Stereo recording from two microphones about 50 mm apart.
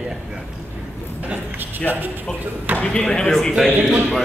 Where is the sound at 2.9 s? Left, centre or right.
Centre.